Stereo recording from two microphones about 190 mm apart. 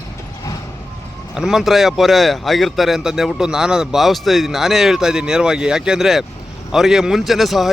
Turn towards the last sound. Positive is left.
turn(degrees=0)  # may be behind; listen again after turning